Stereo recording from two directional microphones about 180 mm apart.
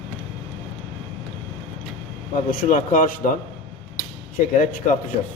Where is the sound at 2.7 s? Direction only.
50° left (ahead or behind).